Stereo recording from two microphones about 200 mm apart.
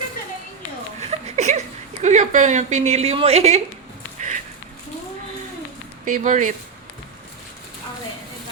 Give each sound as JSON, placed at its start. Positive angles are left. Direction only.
{"t": 1.0, "sound": "a sound", "side_deg": -35}
{"t": 2.8, "sound": "a woman's voice", "side_deg": -30}
{"t": 6.1, "sound": "a woman's voice", "side_deg": -40}